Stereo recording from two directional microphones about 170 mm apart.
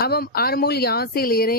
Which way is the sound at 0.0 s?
65° left (ahead or behind).